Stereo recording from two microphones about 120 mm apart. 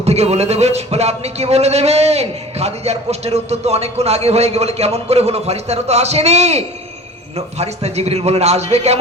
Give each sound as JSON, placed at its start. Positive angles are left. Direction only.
{"t": 0.0, "sound": "speech", "side_deg": -60}